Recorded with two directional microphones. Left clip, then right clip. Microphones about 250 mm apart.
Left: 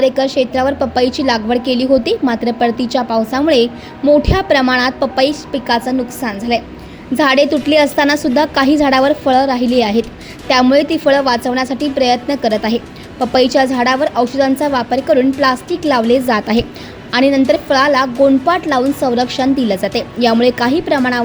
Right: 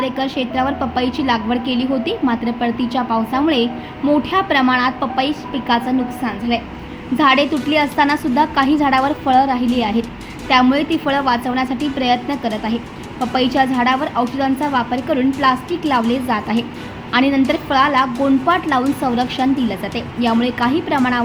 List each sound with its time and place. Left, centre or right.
0.0 s a woman's voice: left